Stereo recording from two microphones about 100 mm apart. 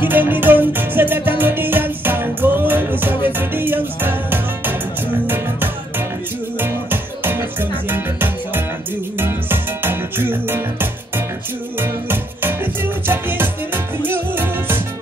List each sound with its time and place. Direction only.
0.1 s music: 20° right (ahead or behind)